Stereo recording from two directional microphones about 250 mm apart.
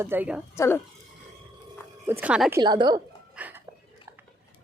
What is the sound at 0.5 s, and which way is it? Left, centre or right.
Speech, centre.